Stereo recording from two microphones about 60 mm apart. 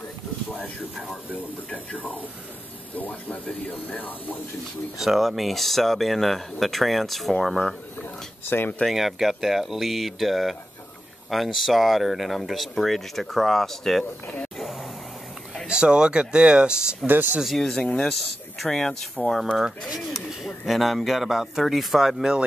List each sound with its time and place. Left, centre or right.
1.7 s speech: left
5.0 s speech: centre
8.5 s speech: left
8.8 s speech: centre
14.6 s a sound: centre
15.6 s speech: centre
17.0 s speech: right
17.4 s speech: centre
17.6 s speech: centre
19.4 s speech: centre